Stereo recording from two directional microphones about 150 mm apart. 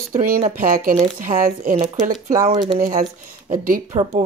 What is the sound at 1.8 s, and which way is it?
Speech, 25° right (ahead or behind).